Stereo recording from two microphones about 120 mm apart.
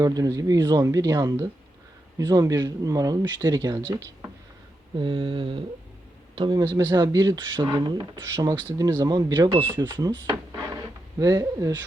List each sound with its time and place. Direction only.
0.0 s speech: 30° right (ahead or behind)
4.9 s mantra: 45° right (ahead or behind)
6.3 s speech: 40° right (ahead or behind)
8.2 s speech: 25° right (ahead or behind)
11.2 s speech: 30° right (ahead or behind)